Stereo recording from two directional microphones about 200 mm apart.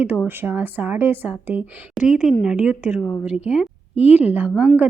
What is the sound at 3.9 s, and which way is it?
Speech, 30° left (ahead or behind).